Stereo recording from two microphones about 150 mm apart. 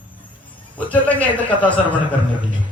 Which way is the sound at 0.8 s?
10° left (ahead or behind).